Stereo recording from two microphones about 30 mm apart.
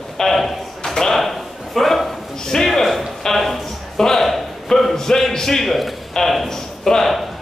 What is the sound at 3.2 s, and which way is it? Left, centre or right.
Music, centre.